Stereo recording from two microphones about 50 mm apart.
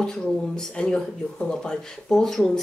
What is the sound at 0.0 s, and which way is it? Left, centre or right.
Speech, centre.